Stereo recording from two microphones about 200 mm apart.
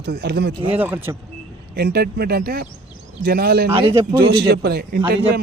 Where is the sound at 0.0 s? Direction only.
50° right (ahead or behind).